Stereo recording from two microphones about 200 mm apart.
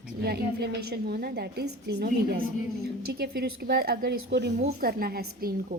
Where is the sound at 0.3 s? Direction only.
50° right (ahead or behind).